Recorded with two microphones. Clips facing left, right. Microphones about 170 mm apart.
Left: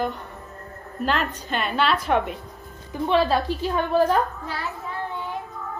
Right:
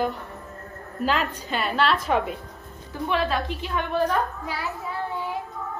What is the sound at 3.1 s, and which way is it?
Speech, 35° left (ahead or behind).